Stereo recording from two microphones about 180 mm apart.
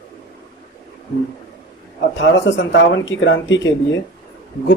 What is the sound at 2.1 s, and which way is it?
Speech, 90° left.